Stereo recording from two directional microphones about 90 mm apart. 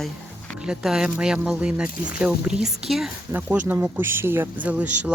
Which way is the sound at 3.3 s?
25° right (ahead or behind).